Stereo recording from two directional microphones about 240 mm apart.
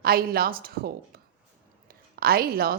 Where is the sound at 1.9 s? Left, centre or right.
Right.